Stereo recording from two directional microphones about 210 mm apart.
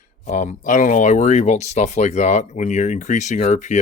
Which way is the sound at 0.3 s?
35° left (ahead or behind).